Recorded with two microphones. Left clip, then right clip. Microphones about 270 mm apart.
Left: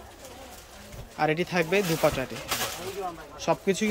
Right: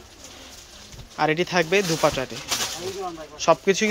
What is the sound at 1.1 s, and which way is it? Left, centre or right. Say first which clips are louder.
Speech: right 4 dB; centre.